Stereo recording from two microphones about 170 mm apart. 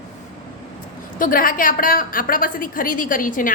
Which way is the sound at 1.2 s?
55° left (ahead or behind).